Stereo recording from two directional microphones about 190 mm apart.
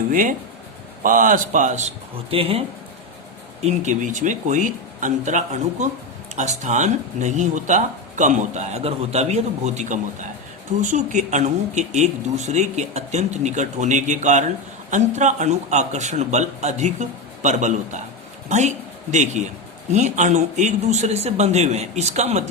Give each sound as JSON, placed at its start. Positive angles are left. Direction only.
{"t": 0.1, "sound": "speech", "side_deg": -45}
{"t": 2.3, "sound": "a man's voice", "side_deg": -30}